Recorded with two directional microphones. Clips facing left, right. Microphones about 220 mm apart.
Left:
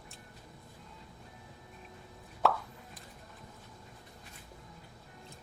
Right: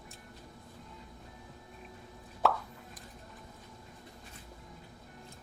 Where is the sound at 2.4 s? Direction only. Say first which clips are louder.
Even; centre (ahead or behind).